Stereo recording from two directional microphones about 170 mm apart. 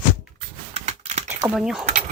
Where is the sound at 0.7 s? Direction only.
40° right (ahead or behind).